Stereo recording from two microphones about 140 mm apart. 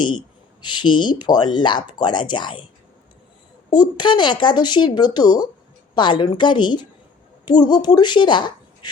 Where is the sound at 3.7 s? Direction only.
30° left (ahead or behind).